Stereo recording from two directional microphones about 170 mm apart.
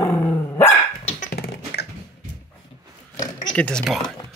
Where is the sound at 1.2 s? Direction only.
70° left (ahead or behind).